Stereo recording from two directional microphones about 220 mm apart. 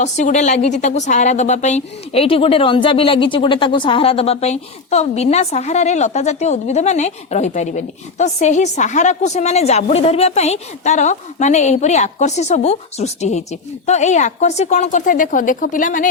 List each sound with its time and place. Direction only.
0.0 s a woman's voice: 35° left (ahead or behind)